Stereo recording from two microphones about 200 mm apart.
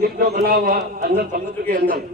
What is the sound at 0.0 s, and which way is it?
A man's voice, 50° right (ahead or behind).